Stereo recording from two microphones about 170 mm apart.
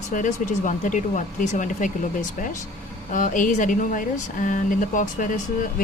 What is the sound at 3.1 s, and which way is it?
A woman's voice, 50° left (ahead or behind).